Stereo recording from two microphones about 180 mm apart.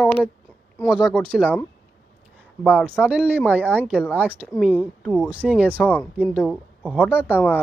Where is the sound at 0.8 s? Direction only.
5° right (ahead or behind).